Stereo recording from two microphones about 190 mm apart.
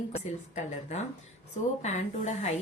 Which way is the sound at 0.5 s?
40° left (ahead or behind).